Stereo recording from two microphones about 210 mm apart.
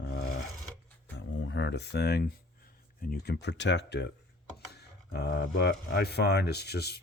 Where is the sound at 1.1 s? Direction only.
60° left (ahead or behind).